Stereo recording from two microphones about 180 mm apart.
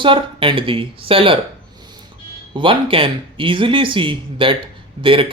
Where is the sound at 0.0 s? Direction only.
30° right (ahead or behind).